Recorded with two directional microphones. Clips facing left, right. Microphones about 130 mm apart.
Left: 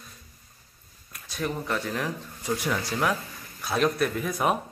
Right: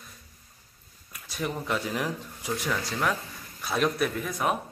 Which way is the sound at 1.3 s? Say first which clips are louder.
Left 1 dB; 5° right (ahead or behind).